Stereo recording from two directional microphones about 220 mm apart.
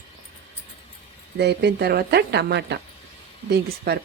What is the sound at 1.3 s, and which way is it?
Speech, 50° right (ahead or behind).